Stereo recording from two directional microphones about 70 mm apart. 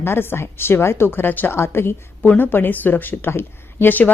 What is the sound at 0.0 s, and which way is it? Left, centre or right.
A woman's voice, left.